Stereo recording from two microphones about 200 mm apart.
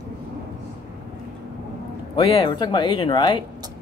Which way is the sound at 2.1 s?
20° left (ahead or behind).